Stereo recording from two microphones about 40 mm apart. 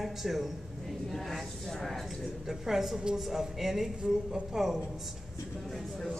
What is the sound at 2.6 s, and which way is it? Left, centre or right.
Speech, centre.